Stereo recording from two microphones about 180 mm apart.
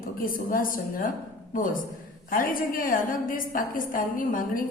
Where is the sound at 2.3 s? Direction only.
50° left (ahead or behind).